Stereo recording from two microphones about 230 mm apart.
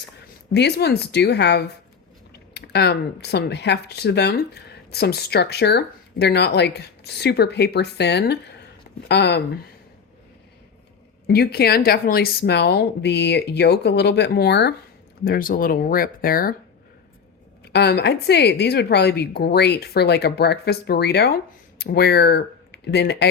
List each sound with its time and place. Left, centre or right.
0.5 s speech: left
11.3 s speech: left
17.7 s speech: left